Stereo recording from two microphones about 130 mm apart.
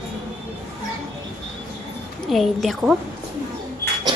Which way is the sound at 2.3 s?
Centre (ahead or behind).